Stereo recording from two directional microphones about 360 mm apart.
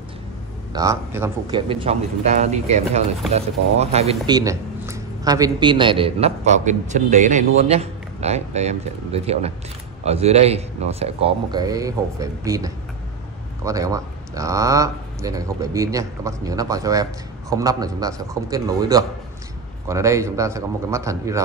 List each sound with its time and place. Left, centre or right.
0.7 s speech: centre